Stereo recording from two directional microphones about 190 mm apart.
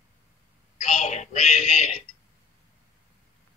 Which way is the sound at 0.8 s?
40° left (ahead or behind).